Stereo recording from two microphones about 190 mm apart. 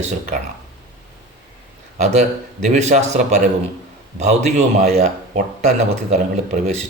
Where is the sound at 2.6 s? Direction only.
40° right (ahead or behind).